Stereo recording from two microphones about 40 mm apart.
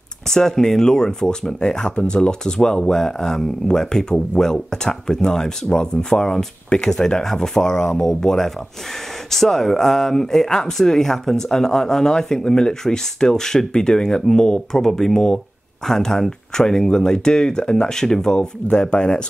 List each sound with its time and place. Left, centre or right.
0.3 s speech: centre